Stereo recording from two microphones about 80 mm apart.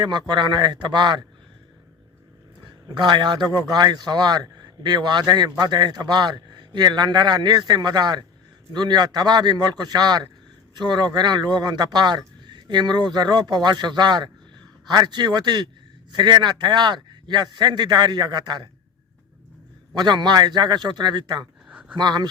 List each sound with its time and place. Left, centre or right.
0.0 s a man's voice: right
2.9 s a man's voice: right
20.0 s a man's voice: right
21.7 s a sound: centre
21.9 s a man's voice: right